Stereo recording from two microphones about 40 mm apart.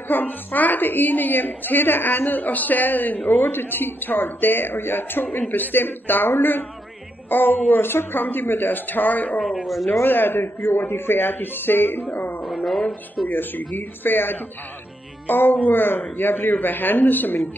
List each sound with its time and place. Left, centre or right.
0.1 s a woman's voice: left
7.7 s a woman's voice: left
9.4 s speech: centre
9.9 s speech: left
12.4 s a sound: centre
13.3 s a woman's voice: left